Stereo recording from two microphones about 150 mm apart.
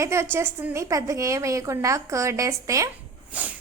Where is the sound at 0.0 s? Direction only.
20° right (ahead or behind).